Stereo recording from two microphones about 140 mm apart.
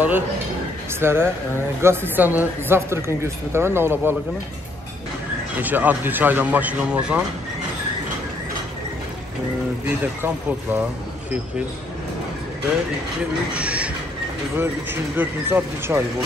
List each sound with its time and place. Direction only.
1.0 s speech: 15° right (ahead or behind)
5.6 s speech: 10° right (ahead or behind)
9.8 s speech: 15° right (ahead or behind)
13.5 s a sound: 10° right (ahead or behind)
14.6 s speech: 15° right (ahead or behind)